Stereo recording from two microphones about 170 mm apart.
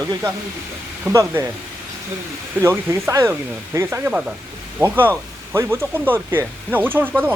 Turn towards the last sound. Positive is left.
turn(degrees=-10)  # may be behind; listen again after turning